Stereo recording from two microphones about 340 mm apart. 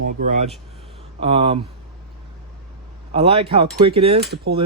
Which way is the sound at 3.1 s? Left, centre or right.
Centre.